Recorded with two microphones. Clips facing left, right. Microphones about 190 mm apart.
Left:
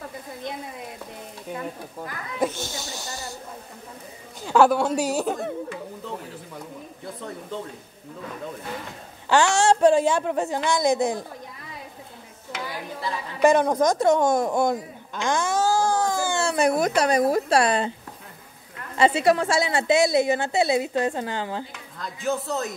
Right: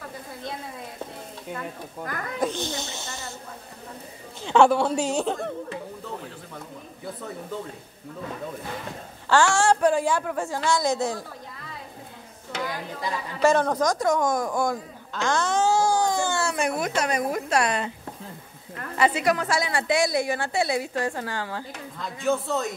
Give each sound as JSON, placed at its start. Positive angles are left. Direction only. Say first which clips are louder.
{"t": 2.5, "sound": "speech", "louder": "right 3 dB", "side_deg": -20}
{"t": 4.5, "sound": "a woman's voice", "louder": "even", "side_deg": 5}
{"t": 9.3, "sound": "a woman's voice", "louder": "left 1 dB", "side_deg": 20}
{"t": 13.4, "sound": "a woman's voice", "louder": "left 3 dB", "side_deg": 15}
{"t": 15.9, "sound": "baby cry", "louder": "even", "side_deg": 5}
{"t": 16.3, "sound": "speech", "louder": "left 4 dB", "side_deg": 35}
{"t": 18.9, "sound": "a woman's voice", "louder": "left 3 dB", "side_deg": 25}
{"t": 22.0, "sound": "a woman's voice", "louder": "right 2 dB", "side_deg": 0}